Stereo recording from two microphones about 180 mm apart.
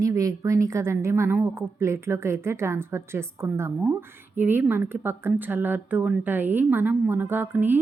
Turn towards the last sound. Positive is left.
turn(degrees=-10)  # may be behind; listen again after turning